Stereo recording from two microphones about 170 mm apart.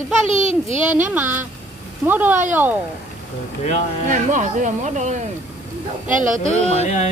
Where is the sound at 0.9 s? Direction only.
10° right (ahead or behind).